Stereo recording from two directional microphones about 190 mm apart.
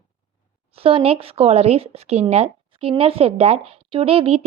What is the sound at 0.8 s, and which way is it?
A woman's voice, 30° right (ahead or behind).